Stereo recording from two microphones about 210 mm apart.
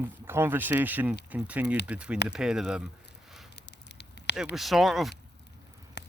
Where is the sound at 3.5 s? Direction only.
55° left (ahead or behind).